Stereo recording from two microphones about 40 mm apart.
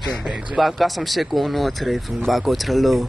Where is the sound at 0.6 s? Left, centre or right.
Centre.